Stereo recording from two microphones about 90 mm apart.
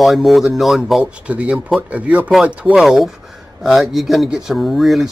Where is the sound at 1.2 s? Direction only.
15° right (ahead or behind).